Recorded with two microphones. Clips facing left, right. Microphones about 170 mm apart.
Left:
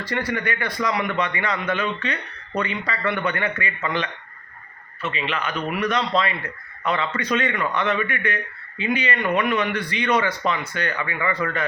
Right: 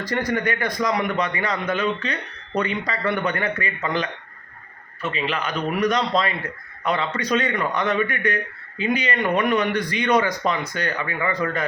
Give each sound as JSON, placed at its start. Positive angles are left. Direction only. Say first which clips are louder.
{"t": 0.0, "sound": "a man's voice", "louder": "right 2 dB", "side_deg": -40}